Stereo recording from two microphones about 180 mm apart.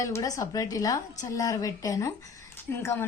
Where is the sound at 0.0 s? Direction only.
20° left (ahead or behind).